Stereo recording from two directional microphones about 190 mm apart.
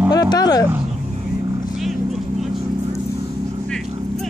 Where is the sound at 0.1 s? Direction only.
20° left (ahead or behind).